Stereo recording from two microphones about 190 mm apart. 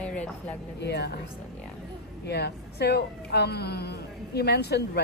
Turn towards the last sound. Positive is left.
turn(degrees=60)  # may be behind; listen again after turning